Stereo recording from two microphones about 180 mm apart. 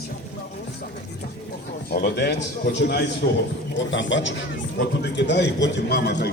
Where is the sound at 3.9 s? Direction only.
90° left; by 6.3 s 65° left (ahead or behind).